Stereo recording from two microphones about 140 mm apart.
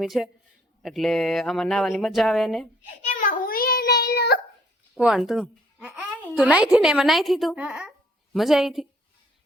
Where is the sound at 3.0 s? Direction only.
70° left (ahead or behind); by 4.4 s 90° left.